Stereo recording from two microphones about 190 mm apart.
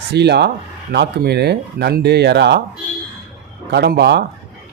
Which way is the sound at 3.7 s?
60° right (ahead or behind).